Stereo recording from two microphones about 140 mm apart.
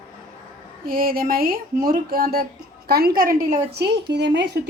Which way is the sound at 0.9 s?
90° right.